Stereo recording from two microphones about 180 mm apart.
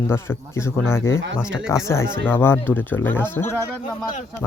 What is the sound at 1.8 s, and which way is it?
Speech, 15° left (ahead or behind).